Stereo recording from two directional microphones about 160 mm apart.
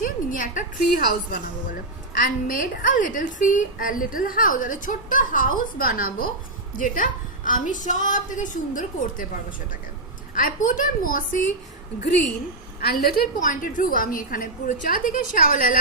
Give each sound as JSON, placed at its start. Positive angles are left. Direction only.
{"t": 0.0, "sound": "a woman's voice", "side_deg": 55}
{"t": 10.3, "sound": "a woman's voice", "side_deg": 55}
{"t": 12.8, "sound": "a woman's voice", "side_deg": 70}